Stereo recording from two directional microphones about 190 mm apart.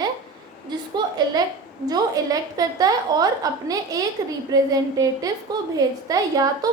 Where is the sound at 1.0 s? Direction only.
25° right (ahead or behind).